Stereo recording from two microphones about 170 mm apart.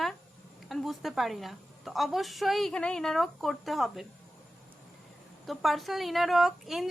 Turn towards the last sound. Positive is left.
turn(degrees=0)  # may be behind; listen again after turning